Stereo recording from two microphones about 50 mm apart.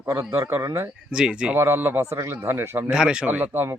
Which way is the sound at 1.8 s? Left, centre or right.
Right.